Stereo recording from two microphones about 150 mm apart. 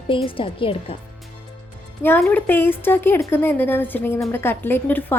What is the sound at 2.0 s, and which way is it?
A woman's voice, 10° left (ahead or behind).